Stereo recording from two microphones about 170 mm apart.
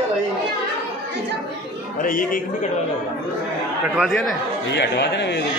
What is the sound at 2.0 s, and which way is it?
Speech, 55° left (ahead or behind).